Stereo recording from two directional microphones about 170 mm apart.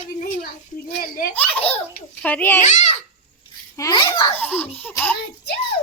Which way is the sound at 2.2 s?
10° left (ahead or behind).